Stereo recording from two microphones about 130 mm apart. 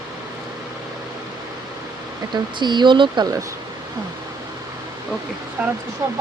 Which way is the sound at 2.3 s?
35° right (ahead or behind).